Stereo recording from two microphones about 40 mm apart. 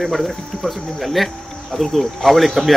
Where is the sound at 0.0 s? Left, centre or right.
Centre.